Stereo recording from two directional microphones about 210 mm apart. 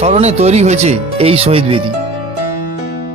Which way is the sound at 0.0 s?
30° right (ahead or behind).